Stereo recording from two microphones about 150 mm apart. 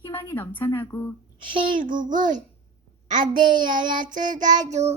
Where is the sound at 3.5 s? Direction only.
65° right (ahead or behind).